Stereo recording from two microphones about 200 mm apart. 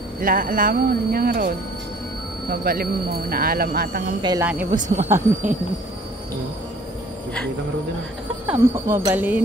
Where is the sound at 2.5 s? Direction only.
50° right (ahead or behind).